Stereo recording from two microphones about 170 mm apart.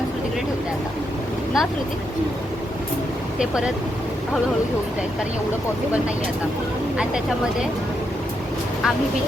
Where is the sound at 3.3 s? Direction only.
5° right (ahead or behind).